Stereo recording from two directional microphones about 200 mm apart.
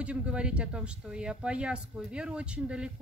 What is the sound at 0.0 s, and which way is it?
Speech, 5° right (ahead or behind).